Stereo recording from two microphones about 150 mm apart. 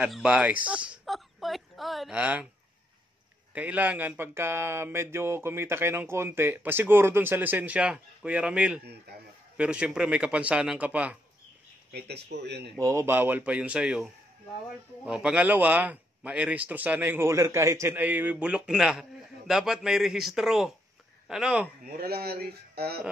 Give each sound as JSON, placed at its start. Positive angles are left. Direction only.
{"t": 0.0, "sound": "a sound", "side_deg": -5}
{"t": 3.5, "sound": "speech", "side_deg": -10}
{"t": 11.9, "sound": "speech", "side_deg": -90}
{"t": 12.7, "sound": "speech", "side_deg": -20}
{"t": 21.8, "sound": "speech", "side_deg": -90}